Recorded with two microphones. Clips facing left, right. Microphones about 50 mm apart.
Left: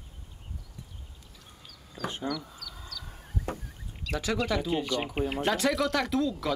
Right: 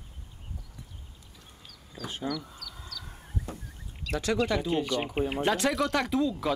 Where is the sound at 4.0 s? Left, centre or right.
Centre.